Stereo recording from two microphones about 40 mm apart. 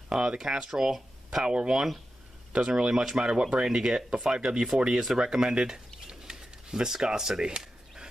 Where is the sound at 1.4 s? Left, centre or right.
Right.